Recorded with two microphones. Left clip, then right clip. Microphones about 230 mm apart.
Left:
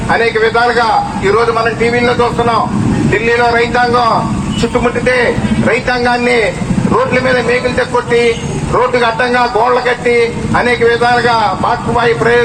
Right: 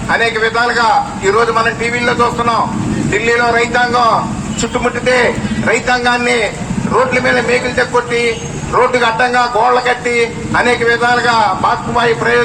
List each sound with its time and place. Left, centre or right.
0.1 s a man's voice: right
1.9 s a man's voice: right
3.2 s a man's voice: right
8.8 s a man's voice: right